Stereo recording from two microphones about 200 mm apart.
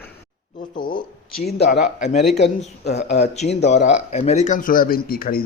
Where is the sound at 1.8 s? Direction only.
35° left (ahead or behind).